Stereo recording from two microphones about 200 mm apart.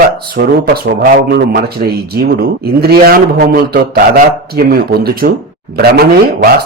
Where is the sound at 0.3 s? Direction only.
55° right (ahead or behind).